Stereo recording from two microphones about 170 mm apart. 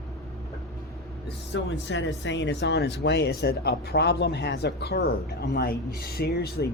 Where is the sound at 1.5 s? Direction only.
90° left.